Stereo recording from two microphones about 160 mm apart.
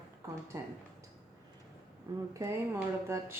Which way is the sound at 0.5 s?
20° right (ahead or behind).